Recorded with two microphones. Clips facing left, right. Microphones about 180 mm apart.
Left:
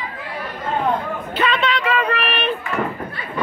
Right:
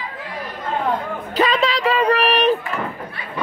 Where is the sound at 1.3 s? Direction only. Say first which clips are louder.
Right 2 dB; 35° right (ahead or behind).